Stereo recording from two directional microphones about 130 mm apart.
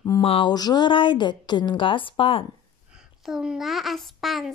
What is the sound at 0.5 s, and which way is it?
A woman's voice, 30° left (ahead or behind).